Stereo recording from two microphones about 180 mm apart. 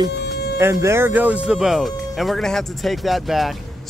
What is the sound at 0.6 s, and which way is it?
Speech, 15° right (ahead or behind).